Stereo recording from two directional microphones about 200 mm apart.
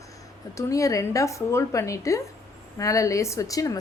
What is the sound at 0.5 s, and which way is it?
Speech, 15° left (ahead or behind).